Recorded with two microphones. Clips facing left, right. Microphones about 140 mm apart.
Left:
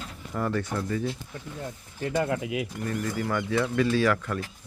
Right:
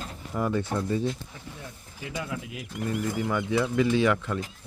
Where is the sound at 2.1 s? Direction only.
65° left (ahead or behind).